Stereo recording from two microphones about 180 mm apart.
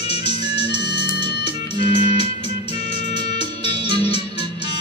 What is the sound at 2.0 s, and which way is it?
Music, 30° left (ahead or behind).